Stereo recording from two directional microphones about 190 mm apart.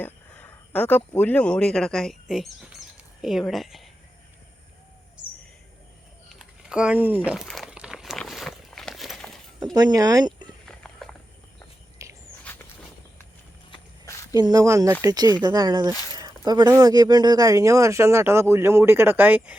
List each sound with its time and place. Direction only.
0.0 s speech: 10° left (ahead or behind)
6.2 s a sound: 5° right (ahead or behind)
7.3 s walk: centre (ahead or behind)
9.7 s speech: 20° right (ahead or behind)
10.7 s horse: 5° left (ahead or behind)
12.0 s walk: 15° right (ahead or behind)
13.7 s walk: 25° left (ahead or behind)
14.3 s speech: 20° right (ahead or behind)